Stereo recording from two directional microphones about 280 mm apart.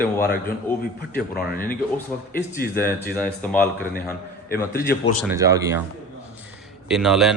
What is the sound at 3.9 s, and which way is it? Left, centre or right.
A man's voice, left.